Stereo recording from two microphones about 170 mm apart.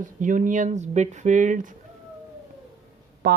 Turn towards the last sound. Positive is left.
turn(degrees=-80)